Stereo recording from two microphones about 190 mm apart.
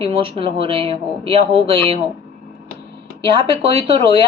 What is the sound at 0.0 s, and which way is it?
Speech, 30° right (ahead or behind).